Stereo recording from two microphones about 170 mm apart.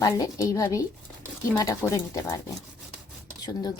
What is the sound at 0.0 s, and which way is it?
Speech, 20° left (ahead or behind).